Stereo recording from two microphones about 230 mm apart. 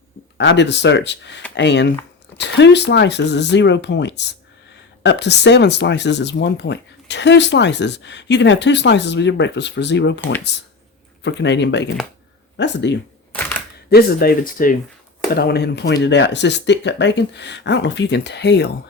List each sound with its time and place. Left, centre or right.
0.3 s speech: left
11.2 s speech: left